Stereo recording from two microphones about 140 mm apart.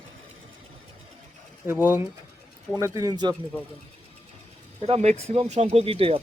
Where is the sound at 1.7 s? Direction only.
15° right (ahead or behind).